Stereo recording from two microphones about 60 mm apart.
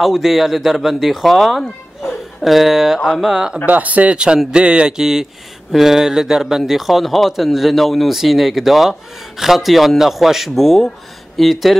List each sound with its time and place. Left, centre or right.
0.0 s a man's voice: centre
3.2 s mantra: centre
3.6 s speech: right
4.4 s mantra: centre
5.7 s a man's voice: centre